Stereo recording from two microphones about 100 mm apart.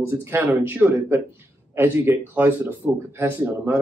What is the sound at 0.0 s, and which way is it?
Speech, 25° right (ahead or behind).